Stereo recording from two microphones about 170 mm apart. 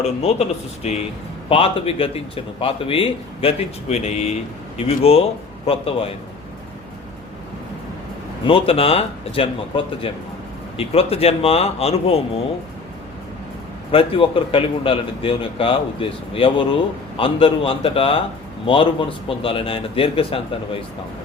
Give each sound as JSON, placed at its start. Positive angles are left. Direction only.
{"t": 0.2, "sound": "a man's voice", "side_deg": 35}
{"t": 8.4, "sound": "a man's voice", "side_deg": 35}
{"t": 13.9, "sound": "a man's voice", "side_deg": 30}